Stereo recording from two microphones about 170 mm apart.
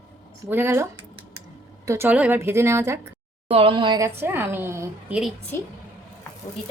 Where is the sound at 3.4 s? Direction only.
30° right (ahead or behind); by 5.1 s 15° right (ahead or behind).